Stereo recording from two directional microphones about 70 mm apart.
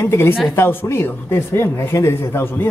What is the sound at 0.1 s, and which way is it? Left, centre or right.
Speech, left.